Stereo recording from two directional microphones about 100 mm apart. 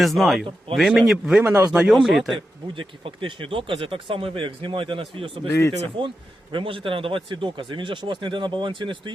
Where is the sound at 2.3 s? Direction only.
60° right (ahead or behind).